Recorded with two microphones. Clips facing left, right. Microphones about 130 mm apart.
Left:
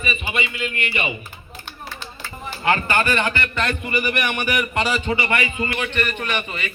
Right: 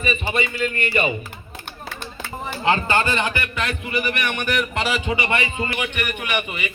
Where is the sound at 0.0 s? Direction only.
35° right (ahead or behind).